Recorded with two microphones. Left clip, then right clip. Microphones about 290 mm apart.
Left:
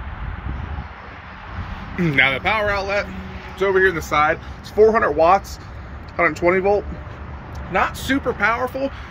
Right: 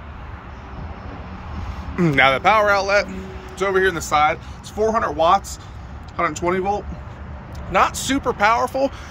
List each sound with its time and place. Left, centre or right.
2.0 s speech: centre
5.0 s speech: right
7.7 s speech: centre